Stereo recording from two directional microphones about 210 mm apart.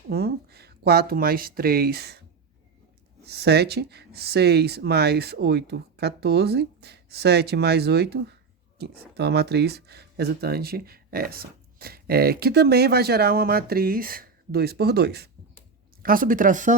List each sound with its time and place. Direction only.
0.1 s speech: 50° right (ahead or behind)
3.2 s speech: 50° right (ahead or behind)